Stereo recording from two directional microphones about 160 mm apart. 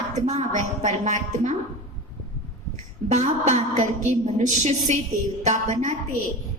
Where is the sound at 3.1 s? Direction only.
45° right (ahead or behind).